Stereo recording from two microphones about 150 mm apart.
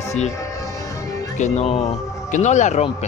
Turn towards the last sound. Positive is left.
turn(degrees=50)  # may be behind; listen again after turning